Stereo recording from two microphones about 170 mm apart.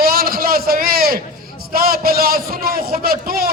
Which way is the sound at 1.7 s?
60° right (ahead or behind).